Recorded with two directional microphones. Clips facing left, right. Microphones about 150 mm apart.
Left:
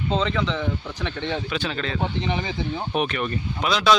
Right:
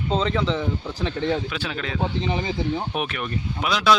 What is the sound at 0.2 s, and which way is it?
Speech, 35° right (ahead or behind).